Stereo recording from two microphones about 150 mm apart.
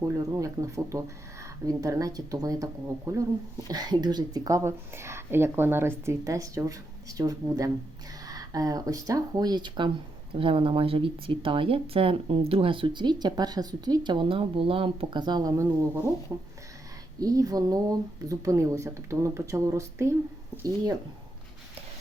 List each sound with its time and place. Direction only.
0.0 s speech: 20° right (ahead or behind)